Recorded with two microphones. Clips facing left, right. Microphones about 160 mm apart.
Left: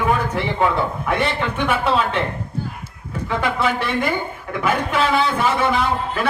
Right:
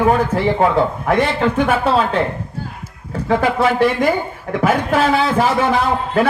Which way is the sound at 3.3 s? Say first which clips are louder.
Right 6 dB; 40° right (ahead or behind).